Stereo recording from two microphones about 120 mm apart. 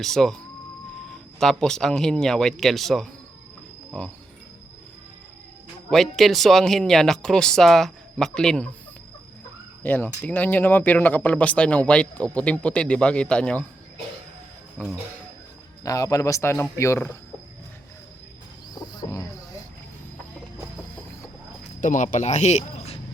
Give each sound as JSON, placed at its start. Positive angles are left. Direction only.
{"t": 0.0, "sound": "speech", "side_deg": 0}
{"t": 5.9, "sound": "speech", "side_deg": 0}
{"t": 9.8, "sound": "speech", "side_deg": 15}
{"t": 15.8, "sound": "a man's voice", "side_deg": 30}
{"t": 18.7, "sound": "wild animals", "side_deg": 35}
{"t": 21.8, "sound": "speech", "side_deg": 90}